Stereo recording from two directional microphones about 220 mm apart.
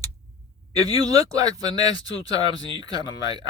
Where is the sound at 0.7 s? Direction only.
15° right (ahead or behind).